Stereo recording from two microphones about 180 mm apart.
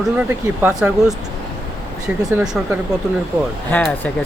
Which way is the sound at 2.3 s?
5° right (ahead or behind).